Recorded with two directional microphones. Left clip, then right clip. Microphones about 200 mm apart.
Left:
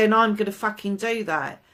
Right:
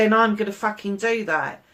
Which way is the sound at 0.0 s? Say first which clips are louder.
Right 1 dB; 50° left (ahead or behind).